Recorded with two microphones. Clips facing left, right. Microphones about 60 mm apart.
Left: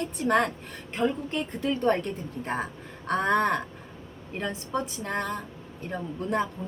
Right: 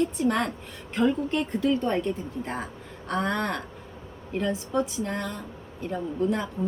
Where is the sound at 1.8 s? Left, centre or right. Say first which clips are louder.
Left 2 dB; left.